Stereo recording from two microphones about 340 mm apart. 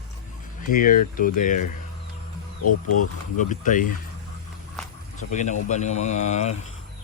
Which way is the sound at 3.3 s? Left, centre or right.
Left.